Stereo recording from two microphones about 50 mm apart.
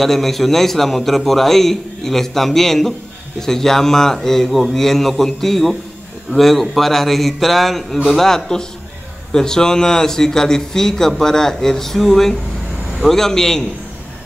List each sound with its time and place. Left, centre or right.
0.0 s a man's voice: centre